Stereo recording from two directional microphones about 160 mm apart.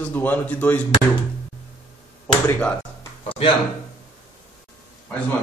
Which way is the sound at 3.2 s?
35° left (ahead or behind).